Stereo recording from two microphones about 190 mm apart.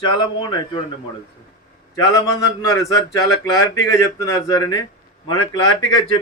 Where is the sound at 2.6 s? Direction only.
15° left (ahead or behind).